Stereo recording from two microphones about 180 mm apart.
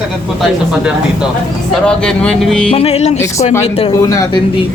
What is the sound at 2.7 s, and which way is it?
Music, 35° left (ahead or behind).